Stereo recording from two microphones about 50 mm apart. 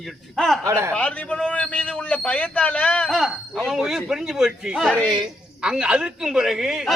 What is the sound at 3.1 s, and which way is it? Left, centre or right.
Speech, centre.